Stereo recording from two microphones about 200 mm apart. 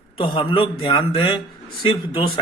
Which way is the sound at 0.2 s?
25° left (ahead or behind).